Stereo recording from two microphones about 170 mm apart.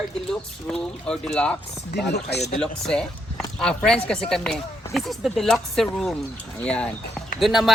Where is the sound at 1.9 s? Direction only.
75° left (ahead or behind).